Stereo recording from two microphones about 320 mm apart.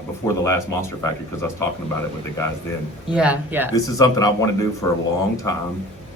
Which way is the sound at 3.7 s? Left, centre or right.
Centre.